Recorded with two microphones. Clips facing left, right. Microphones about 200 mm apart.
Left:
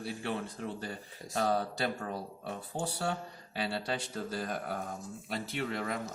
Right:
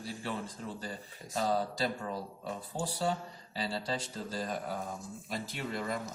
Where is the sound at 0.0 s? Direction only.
60° left (ahead or behind).